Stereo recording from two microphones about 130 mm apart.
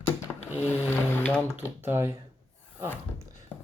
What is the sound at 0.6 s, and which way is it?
Speech, 15° left (ahead or behind).